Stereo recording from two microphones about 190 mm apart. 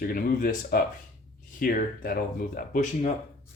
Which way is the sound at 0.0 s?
50° left (ahead or behind).